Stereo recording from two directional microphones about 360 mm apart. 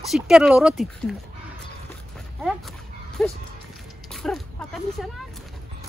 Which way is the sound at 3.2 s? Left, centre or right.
Centre.